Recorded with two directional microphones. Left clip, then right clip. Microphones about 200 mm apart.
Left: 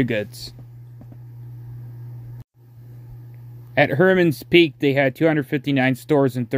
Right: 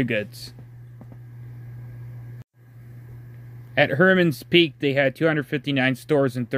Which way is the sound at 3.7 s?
20° left (ahead or behind).